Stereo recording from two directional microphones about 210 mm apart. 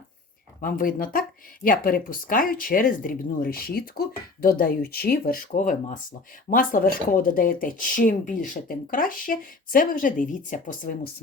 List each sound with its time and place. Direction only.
0.6 s speech: 40° left (ahead or behind)